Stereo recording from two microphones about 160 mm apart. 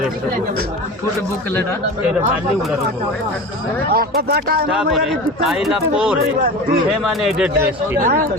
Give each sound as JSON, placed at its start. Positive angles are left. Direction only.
{"t": 3.9, "sound": "speech", "side_deg": -70}
{"t": 4.7, "sound": "a man's voice", "side_deg": -5}
{"t": 7.9, "sound": "speech", "side_deg": -60}